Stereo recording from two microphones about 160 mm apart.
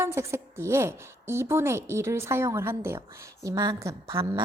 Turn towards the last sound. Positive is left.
turn(degrees=-20)  # may be behind; listen again after turning